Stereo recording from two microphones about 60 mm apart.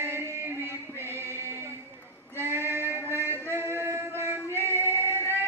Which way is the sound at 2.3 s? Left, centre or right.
Right.